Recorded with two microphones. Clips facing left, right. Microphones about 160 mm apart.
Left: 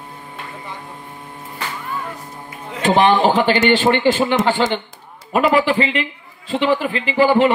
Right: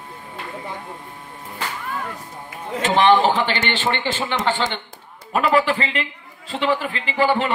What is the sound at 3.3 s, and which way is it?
Speech, 40° left (ahead or behind).